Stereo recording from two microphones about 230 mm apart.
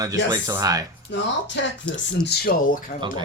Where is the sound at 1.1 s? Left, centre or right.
Left.